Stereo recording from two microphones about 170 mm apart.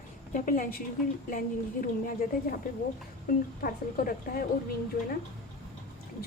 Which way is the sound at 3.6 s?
55° left (ahead or behind).